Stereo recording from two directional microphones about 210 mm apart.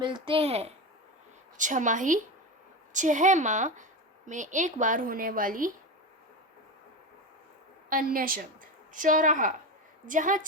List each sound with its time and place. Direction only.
0.0 s a woman's voice: 25° right (ahead or behind); by 5.7 s 40° right (ahead or behind)
7.9 s a woman's voice: 40° right (ahead or behind)